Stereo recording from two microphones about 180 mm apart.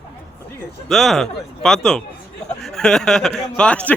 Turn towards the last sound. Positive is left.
turn(degrees=5)  # may be behind; listen again after turning